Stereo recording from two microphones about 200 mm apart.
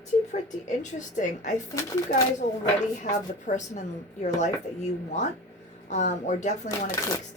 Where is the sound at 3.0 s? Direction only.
40° left (ahead or behind).